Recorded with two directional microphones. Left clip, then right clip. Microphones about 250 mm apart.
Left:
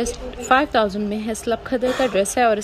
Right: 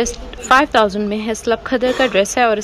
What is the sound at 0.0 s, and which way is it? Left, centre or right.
A woman's voice, centre.